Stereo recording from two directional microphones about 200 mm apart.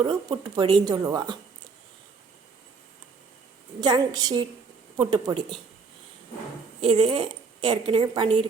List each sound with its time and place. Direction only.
0.0 s a woman's voice: 20° right (ahead or behind)
3.8 s a woman's voice: 20° right (ahead or behind)
6.8 s a woman's voice: 25° right (ahead or behind)